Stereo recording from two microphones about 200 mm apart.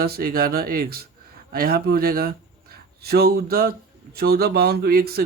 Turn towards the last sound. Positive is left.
turn(degrees=-50)  # may be behind; listen again after turning